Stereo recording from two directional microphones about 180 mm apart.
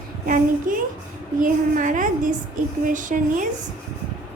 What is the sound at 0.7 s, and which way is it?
A woman's voice, 50° right (ahead or behind).